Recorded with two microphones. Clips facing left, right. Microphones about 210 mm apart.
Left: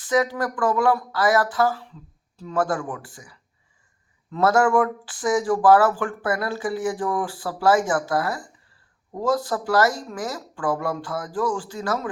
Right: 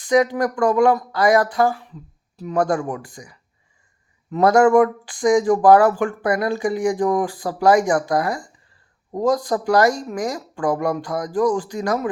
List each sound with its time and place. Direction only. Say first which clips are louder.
0.0 s speech: right 5 dB; 20° right (ahead or behind)